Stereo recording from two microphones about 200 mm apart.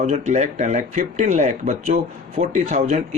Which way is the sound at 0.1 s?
35° right (ahead or behind).